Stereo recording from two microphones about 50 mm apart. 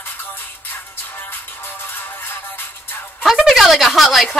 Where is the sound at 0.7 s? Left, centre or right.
Left.